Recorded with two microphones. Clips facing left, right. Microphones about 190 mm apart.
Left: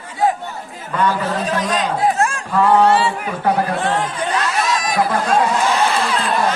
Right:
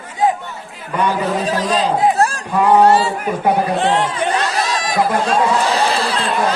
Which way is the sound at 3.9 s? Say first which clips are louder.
Right 3 dB; 70° right (ahead or behind).